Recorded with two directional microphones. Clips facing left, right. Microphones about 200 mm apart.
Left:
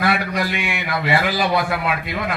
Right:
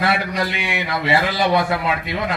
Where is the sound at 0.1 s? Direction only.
25° right (ahead or behind).